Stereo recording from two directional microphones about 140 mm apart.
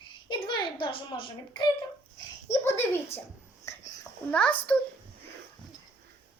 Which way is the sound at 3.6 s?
25° left (ahead or behind).